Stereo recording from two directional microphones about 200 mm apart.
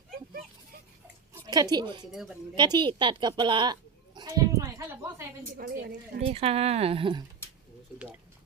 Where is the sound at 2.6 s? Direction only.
20° right (ahead or behind).